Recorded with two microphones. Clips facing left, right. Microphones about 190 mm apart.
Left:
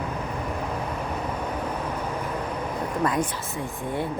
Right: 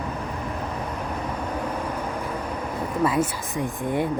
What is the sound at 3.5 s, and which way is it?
Speech, 15° right (ahead or behind).